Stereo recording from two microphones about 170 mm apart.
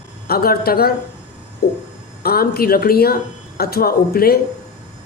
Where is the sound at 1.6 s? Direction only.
70° left (ahead or behind).